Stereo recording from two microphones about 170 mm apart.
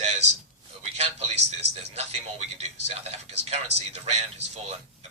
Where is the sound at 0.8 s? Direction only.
35° right (ahead or behind).